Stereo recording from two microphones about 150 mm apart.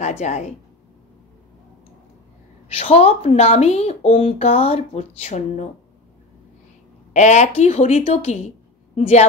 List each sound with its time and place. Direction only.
0.0 s a woman's voice: 50° left (ahead or behind)
2.7 s a woman's voice: 45° left (ahead or behind)
7.2 s a woman's voice: 50° left (ahead or behind)